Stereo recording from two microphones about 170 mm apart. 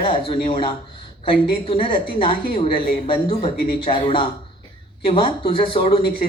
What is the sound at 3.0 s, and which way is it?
Speech, 30° left (ahead or behind).